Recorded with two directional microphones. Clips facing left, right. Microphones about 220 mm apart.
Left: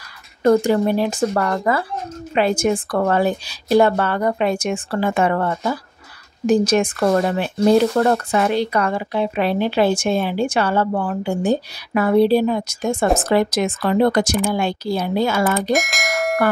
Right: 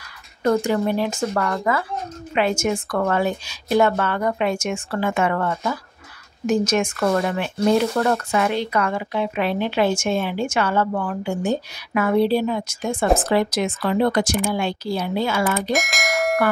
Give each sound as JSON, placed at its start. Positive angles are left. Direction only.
{"t": 0.5, "sound": "speech", "side_deg": 35}
{"t": 15.7, "sound": "bell", "side_deg": 0}